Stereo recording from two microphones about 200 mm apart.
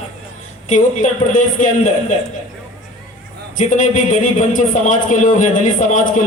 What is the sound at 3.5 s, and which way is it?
A man's voice, 40° left (ahead or behind).